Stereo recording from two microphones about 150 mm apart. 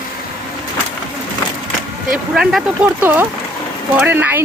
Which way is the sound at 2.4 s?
5° right (ahead or behind).